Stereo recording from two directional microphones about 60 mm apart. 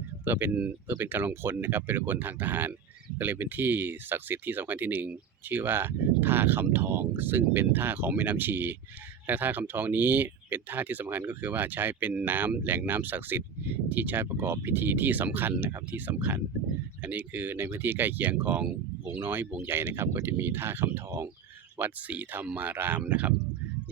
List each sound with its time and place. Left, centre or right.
0.3 s speech: right
14.3 s speech: right
21.8 s speech: right